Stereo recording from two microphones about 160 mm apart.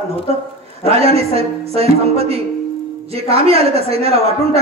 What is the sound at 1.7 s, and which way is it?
A woman's voice, 40° right (ahead or behind).